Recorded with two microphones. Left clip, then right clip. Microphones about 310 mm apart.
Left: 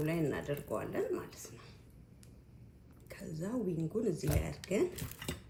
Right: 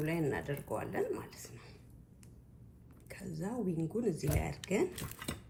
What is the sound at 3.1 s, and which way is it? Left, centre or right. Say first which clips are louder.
Speech: left 1 dB; right.